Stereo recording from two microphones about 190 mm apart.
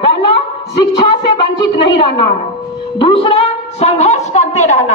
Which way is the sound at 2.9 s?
30° left (ahead or behind).